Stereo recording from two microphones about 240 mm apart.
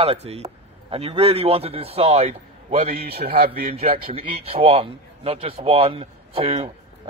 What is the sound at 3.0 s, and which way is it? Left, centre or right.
Speech, right.